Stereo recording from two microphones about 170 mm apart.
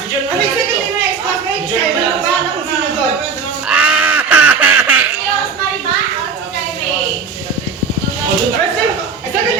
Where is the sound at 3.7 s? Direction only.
5° right (ahead or behind).